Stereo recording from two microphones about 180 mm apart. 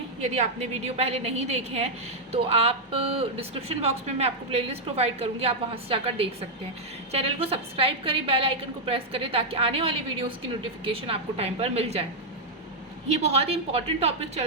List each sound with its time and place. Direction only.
0.2 s a woman's voice: 35° right (ahead or behind)
13.1 s a woman's voice: 35° right (ahead or behind)